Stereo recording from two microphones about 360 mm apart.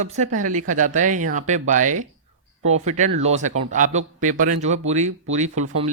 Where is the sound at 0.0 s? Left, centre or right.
Centre.